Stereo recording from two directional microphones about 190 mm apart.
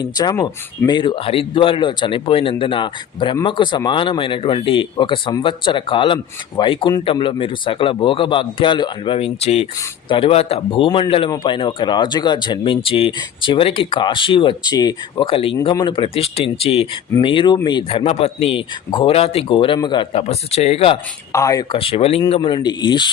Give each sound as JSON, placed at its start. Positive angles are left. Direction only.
{"t": 0.0, "sound": "speech", "side_deg": 20}
{"t": 21.3, "sound": "speech", "side_deg": 15}